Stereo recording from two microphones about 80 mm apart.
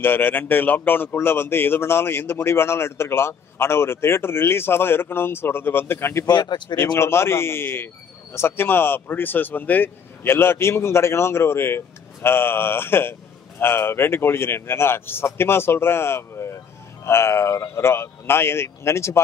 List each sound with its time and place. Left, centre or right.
0.0 s a man's voice: left